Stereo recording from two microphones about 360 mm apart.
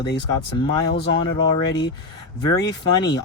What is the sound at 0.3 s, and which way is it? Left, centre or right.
Speech, centre.